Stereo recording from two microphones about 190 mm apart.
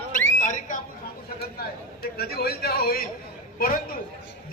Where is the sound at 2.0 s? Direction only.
55° left (ahead or behind).